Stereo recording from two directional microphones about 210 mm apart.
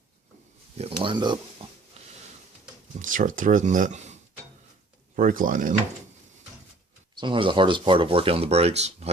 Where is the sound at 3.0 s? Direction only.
40° right (ahead or behind).